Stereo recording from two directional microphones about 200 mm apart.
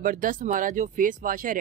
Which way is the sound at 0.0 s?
45° right (ahead or behind).